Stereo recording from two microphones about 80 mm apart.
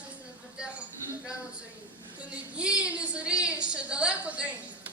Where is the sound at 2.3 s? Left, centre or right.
Centre.